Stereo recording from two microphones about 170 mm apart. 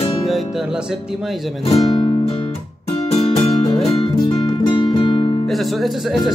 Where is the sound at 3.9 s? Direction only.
25° left (ahead or behind).